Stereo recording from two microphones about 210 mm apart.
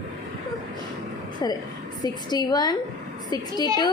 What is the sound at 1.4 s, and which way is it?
A woman's voice, 20° left (ahead or behind).